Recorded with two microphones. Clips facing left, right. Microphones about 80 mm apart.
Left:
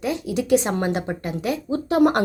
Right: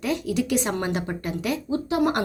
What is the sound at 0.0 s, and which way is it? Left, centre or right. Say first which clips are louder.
Speech: even; left.